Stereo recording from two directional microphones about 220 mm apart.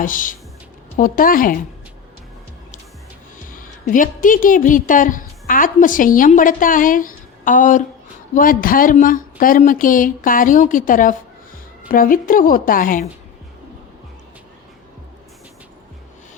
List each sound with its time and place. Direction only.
0.0 s speech: 35° left (ahead or behind)
3.5 s a woman's voice: 35° left (ahead or behind)